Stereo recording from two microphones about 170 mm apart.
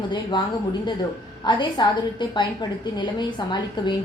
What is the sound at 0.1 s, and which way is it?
A woman's voice, 25° left (ahead or behind).